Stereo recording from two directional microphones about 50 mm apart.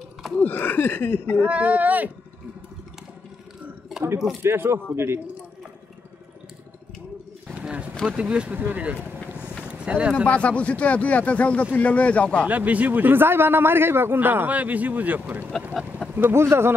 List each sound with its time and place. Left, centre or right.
0.4 s speech: left
1.4 s a man's voice: right
3.9 s a sound: centre
4.4 s speech: right
8.1 s speech: right
8.5 s a man's voice: right
9.7 s speech: right
10.2 s speech: left
12.4 s a man's voice: right
16.3 s speech: right